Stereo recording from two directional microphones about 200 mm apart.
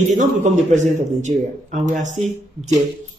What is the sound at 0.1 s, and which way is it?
A man's voice, 35° right (ahead or behind).